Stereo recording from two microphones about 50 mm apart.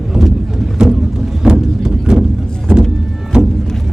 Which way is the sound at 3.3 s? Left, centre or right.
Centre.